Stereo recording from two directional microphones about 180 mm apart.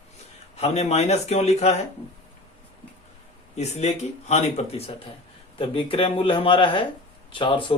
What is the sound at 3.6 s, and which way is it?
Speech, 40° left (ahead or behind).